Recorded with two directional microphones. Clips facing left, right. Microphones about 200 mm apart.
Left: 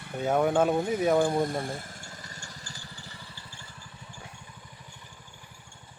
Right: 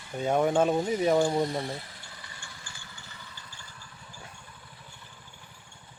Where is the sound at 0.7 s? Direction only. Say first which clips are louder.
Even; 55° left (ahead or behind).